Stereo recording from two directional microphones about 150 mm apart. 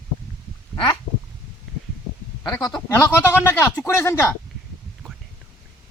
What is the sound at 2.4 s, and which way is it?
A man's voice, 25° left (ahead or behind).